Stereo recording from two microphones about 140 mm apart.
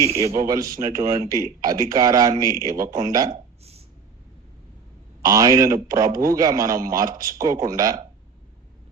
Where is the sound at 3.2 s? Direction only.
45° right (ahead or behind).